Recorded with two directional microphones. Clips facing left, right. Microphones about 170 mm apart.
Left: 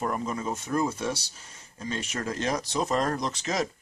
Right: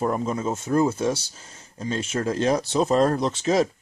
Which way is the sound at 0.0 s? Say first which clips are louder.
Right 5 dB; 30° right (ahead or behind).